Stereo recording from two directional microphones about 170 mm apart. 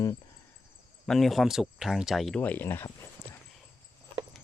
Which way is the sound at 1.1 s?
Centre (ahead or behind).